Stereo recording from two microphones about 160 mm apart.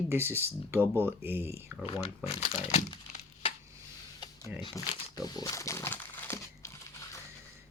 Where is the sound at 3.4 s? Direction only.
35° left (ahead or behind).